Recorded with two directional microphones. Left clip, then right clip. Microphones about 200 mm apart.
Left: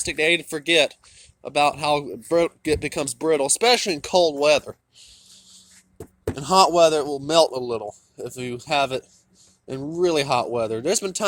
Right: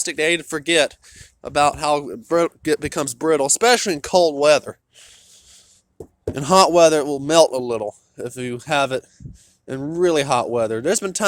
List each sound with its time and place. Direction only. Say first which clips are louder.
0.0 s speech: right 1 dB; 20° right (ahead or behind)
6.3 s a man's voice: right 3 dB; 40° right (ahead or behind)